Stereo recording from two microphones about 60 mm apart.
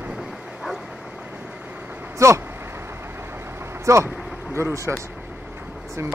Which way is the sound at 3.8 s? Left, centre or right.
Right.